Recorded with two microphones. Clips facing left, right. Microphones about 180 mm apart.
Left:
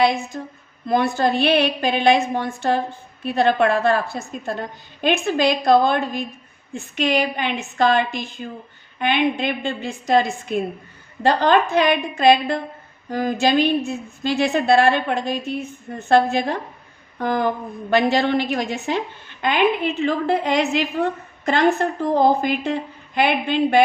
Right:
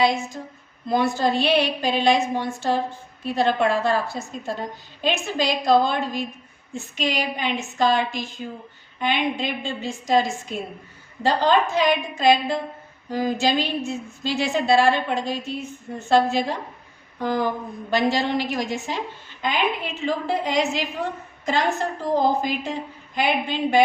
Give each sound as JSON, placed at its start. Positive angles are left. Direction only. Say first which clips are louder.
{"t": 0.0, "sound": "a woman's voice", "louder": "left 2 dB", "side_deg": 60}